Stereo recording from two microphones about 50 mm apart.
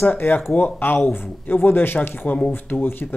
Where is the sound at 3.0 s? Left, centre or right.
Left.